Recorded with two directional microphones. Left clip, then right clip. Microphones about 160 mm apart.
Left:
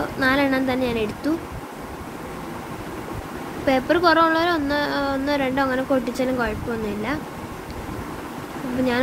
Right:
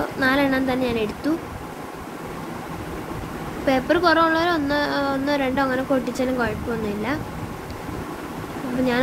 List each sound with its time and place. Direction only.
0.2 s speech: centre (ahead or behind)
3.6 s speech: 5° left (ahead or behind)